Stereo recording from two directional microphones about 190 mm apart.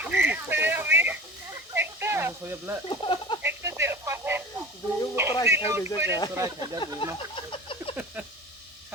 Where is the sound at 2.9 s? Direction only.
25° left (ahead or behind).